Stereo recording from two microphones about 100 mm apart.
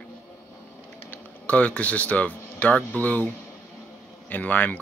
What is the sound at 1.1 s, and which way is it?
Speech, 15° left (ahead or behind).